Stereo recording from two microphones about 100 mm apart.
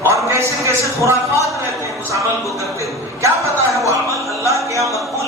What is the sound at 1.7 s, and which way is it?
Speech, 30° right (ahead or behind).